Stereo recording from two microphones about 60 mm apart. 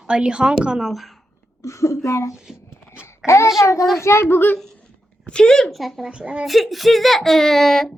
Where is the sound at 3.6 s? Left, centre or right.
Left.